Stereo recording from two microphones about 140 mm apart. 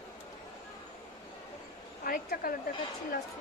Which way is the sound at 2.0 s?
90° left.